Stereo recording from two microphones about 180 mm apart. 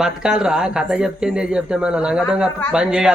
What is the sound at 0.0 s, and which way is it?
Speech, 5° right (ahead or behind).